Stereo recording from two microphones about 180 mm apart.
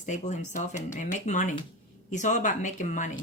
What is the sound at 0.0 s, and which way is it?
Speech, 40° left (ahead or behind).